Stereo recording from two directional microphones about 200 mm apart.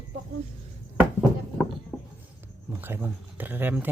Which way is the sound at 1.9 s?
5° left (ahead or behind).